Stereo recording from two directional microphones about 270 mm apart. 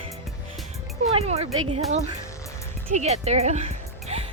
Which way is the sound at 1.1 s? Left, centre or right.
Right.